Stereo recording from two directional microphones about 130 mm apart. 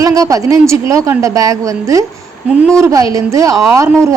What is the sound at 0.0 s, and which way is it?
A woman's voice, 25° right (ahead or behind).